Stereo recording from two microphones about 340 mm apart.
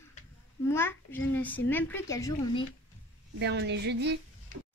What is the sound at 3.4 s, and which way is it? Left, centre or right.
Speech, right.